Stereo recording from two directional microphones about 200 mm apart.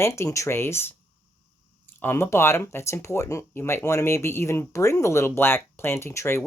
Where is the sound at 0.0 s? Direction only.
15° left (ahead or behind).